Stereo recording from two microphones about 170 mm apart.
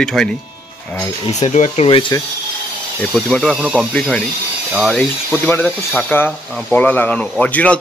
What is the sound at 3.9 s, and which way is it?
Speech, 5° left (ahead or behind).